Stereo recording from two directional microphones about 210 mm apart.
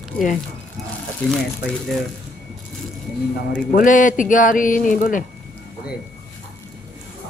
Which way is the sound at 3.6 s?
40° left (ahead or behind).